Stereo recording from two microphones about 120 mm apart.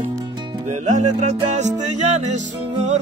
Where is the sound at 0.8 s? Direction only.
75° right (ahead or behind).